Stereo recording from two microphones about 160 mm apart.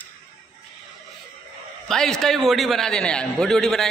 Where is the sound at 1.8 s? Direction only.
5° left (ahead or behind).